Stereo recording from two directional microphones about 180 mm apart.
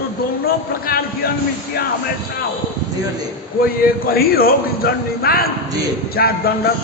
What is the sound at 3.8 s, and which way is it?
A man's voice, 55° left (ahead or behind).